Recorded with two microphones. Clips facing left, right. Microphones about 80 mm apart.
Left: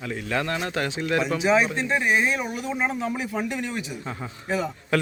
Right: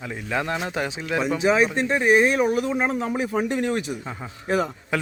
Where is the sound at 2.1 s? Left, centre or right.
Right.